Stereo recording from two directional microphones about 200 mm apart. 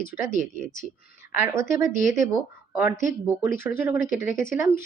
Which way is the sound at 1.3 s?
10° right (ahead or behind).